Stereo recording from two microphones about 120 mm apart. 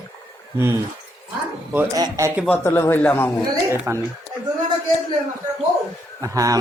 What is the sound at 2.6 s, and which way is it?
Speech, 20° left (ahead or behind).